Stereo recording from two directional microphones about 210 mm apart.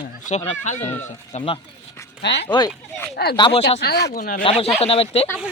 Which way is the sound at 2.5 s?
20° left (ahead or behind).